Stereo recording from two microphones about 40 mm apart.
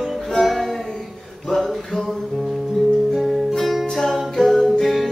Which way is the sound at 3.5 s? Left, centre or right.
Centre.